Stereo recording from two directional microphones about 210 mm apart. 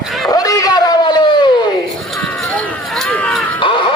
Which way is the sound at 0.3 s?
15° left (ahead or behind).